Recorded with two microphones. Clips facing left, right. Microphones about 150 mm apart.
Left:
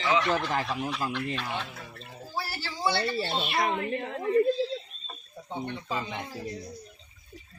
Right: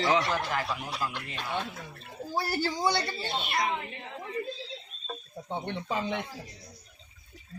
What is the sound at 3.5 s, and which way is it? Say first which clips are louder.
Speech: left 4 dB; 55° left (ahead or behind).